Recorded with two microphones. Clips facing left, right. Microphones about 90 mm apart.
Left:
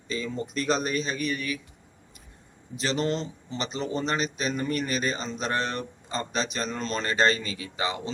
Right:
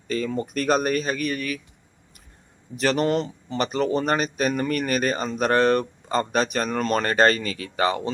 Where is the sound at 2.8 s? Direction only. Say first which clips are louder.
Right 6 dB; 55° right (ahead or behind).